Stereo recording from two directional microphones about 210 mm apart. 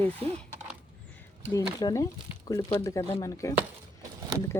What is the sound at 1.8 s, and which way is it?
Speech, 15° left (ahead or behind).